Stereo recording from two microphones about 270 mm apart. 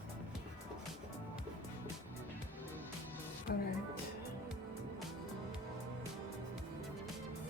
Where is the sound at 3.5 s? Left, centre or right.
Left.